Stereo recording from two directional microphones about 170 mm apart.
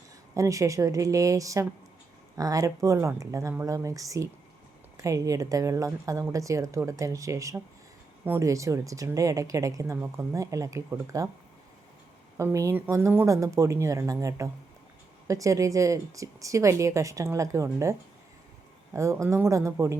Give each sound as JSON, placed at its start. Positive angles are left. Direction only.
{"t": 0.3, "sound": "speech", "side_deg": -20}
{"t": 12.4, "sound": "speech", "side_deg": -15}
{"t": 18.9, "sound": "speech", "side_deg": -15}